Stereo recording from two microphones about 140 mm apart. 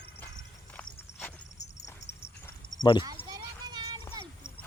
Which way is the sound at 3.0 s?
30° right (ahead or behind).